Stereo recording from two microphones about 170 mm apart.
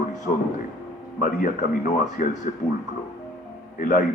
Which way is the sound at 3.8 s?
50° left (ahead or behind).